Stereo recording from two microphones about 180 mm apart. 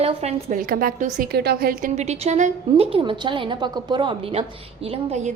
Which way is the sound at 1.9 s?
40° right (ahead or behind).